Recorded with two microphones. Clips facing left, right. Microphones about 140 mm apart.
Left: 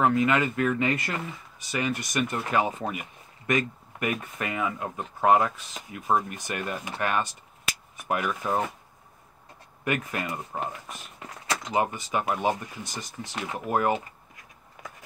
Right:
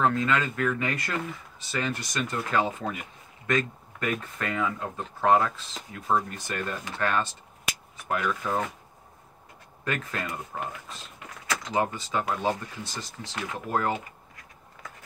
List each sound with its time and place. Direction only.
0.0 s speech: 15° left (ahead or behind)
9.8 s speech: 15° left (ahead or behind)
11.7 s speech: 20° left (ahead or behind)